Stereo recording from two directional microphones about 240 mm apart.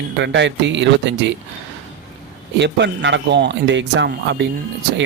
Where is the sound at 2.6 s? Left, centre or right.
Right.